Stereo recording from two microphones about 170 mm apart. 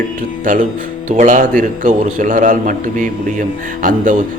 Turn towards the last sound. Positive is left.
turn(degrees=-50)  # may be behind; listen again after turning